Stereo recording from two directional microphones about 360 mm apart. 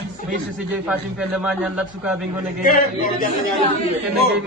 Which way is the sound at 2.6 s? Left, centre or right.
Left.